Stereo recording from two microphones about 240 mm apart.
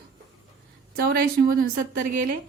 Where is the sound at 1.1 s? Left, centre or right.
Right.